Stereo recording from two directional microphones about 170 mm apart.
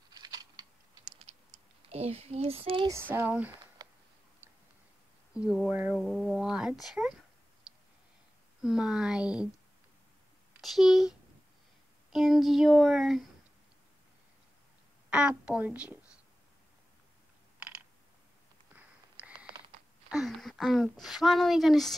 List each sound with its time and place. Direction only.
0.1 s typing: 25° right (ahead or behind)
1.9 s a sound: 35° right (ahead or behind)
2.9 s a woman's voice: 15° right (ahead or behind)
3.8 s a sound: 20° right (ahead or behind)
5.3 s speech: 5° right (ahead or behind)
8.6 s speech: 5° right (ahead or behind)
10.6 s speech: centre (ahead or behind)
15.0 s a woman's voice: 5° right (ahead or behind)
18.8 s a sound: 10° right (ahead or behind)
21.0 s speech: centre (ahead or behind)